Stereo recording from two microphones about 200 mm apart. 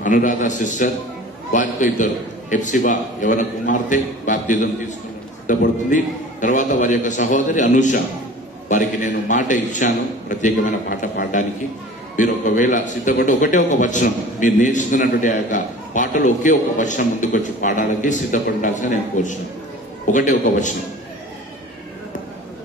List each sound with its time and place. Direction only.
0.0 s a man's voice: 40° left (ahead or behind)